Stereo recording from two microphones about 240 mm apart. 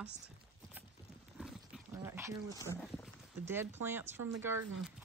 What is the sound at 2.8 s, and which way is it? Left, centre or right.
Speech, centre.